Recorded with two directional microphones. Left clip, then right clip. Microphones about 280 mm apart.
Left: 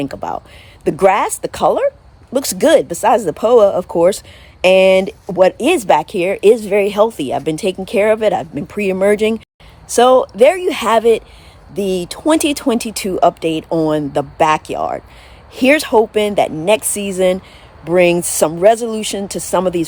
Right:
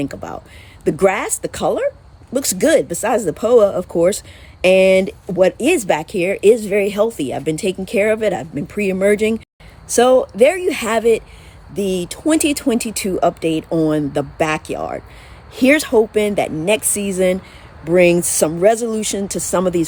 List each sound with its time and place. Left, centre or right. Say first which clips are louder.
0.0 s speech: left 4 dB; centre